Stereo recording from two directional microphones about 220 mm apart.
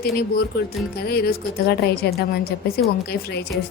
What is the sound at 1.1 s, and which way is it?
A woman's voice, 45° left (ahead or behind).